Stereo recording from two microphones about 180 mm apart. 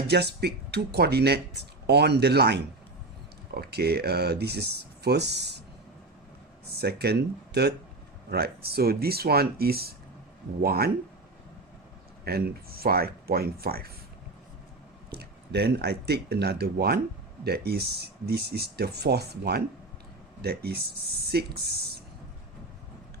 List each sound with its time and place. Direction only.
0.1 s speech: 65° right (ahead or behind)
6.7 s speech: 65° right (ahead or behind)
12.2 s speech: 60° right (ahead or behind)
15.1 s speech: 65° right (ahead or behind)